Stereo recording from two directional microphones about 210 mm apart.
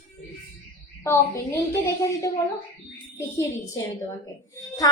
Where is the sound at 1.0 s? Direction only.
15° left (ahead or behind).